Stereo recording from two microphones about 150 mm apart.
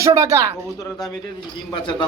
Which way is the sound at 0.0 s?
20° right (ahead or behind).